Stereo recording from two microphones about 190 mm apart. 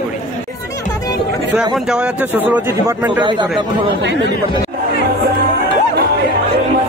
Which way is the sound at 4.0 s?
65° right (ahead or behind).